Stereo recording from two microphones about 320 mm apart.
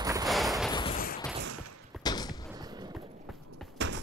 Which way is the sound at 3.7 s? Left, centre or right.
Right.